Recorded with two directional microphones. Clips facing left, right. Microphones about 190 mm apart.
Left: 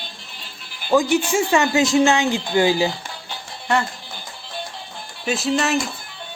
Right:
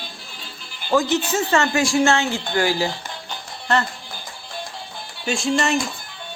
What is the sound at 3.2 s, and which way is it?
Music, 10° left (ahead or behind).